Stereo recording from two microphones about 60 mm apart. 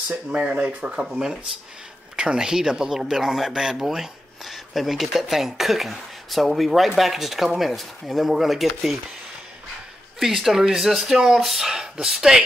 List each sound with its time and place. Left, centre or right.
0.3 s speech: right; by 8.9 s centre
10.1 s speech: centre